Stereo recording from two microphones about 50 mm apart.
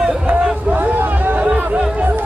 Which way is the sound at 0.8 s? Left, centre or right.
Right.